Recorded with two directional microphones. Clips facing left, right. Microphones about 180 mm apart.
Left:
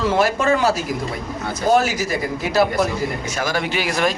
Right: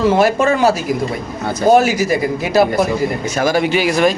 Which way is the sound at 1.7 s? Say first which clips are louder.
Right 5 dB; 15° right (ahead or behind).